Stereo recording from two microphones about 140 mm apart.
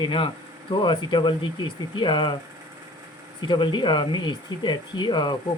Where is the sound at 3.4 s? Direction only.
35° left (ahead or behind).